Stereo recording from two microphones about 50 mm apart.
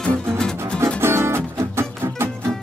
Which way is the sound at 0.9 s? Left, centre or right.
Right.